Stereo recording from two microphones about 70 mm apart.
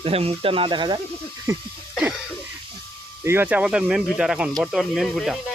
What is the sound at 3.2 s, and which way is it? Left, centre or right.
Speech, right.